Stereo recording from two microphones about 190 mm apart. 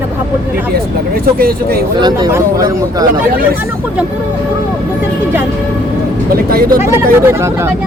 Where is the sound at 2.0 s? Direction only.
20° right (ahead or behind).